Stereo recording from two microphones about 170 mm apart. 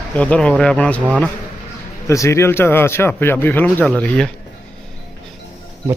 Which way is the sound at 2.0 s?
15° left (ahead or behind).